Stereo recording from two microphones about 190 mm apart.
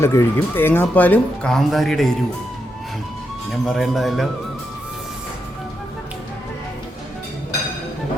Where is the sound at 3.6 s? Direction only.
Centre (ahead or behind).